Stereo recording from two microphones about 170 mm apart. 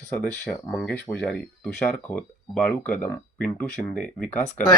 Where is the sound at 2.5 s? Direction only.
5° left (ahead or behind).